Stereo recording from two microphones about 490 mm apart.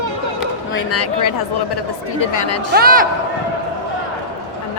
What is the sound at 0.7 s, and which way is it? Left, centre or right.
Speech, left.